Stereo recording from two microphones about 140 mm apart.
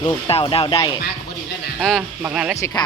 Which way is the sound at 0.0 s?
40° left (ahead or behind).